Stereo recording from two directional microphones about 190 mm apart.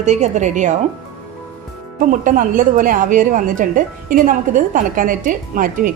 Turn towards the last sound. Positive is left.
turn(degrees=-45)  # may be behind; listen again after turning